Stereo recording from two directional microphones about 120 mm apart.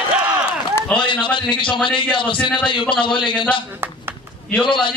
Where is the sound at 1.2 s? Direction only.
45° left (ahead or behind).